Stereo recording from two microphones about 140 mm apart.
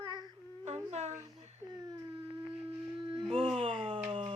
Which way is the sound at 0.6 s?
50° right (ahead or behind).